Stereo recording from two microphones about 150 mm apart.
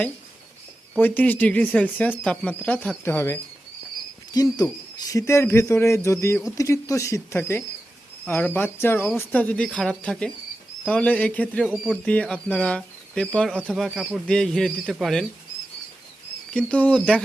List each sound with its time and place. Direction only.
0.9 s speech: 10° left (ahead or behind)
3.0 s speech: 15° left (ahead or behind)
4.4 s hoot: 25° left (ahead or behind)
8.3 s speech: 10° left (ahead or behind)
16.5 s speech: 5° left (ahead or behind)